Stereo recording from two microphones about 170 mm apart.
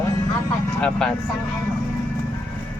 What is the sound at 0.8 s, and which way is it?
Speech, 5° left (ahead or behind).